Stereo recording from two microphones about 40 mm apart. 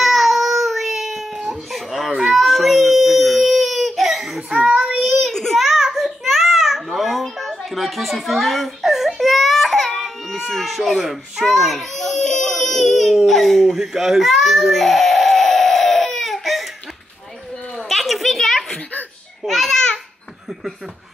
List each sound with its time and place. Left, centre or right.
0.0 s baby cry: centre
1.8 s a sound: centre
2.3 s baby cry: centre
4.6 s child singing: right
5.3 s a sound: centre
5.6 s giggle: centre
6.2 s babbling: centre
7.2 s baby cry: centre
10.5 s a child's voice: centre
13.7 s baby cry: centre
17.7 s a sound: centre
19.4 s babbling: centre